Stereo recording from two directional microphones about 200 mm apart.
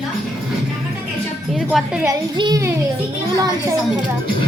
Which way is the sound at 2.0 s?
15° right (ahead or behind).